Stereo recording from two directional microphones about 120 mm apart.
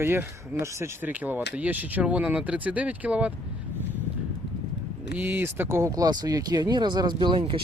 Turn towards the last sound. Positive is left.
turn(degrees=-40)  # may be behind; listen again after turning